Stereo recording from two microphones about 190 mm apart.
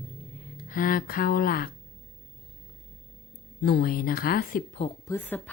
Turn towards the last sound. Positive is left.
turn(degrees=10)  # may be behind; listen again after turning